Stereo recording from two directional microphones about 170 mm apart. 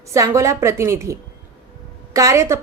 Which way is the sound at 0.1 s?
15° right (ahead or behind).